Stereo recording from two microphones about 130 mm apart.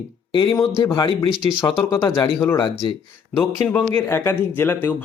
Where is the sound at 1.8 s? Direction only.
25° left (ahead or behind).